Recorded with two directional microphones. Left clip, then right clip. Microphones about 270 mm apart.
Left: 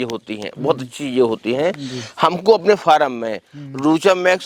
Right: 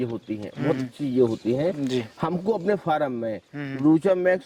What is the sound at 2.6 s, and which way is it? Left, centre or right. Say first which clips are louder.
Speech: left 10 dB; centre.